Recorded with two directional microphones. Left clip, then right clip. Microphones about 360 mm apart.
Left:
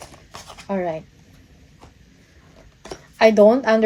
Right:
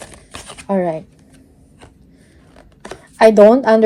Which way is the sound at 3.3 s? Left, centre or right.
Right.